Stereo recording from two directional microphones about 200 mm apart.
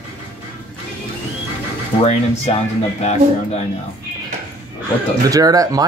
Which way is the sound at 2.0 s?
35° left (ahead or behind).